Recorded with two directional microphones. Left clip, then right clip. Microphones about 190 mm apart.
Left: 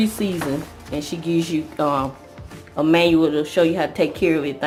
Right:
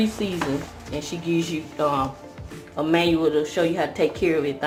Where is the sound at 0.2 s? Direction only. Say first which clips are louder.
Left 2 dB; 45° left (ahead or behind).